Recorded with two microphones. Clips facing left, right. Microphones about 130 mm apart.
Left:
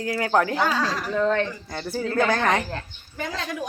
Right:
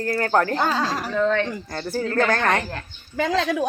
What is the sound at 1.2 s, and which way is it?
Speech, 35° left (ahead or behind).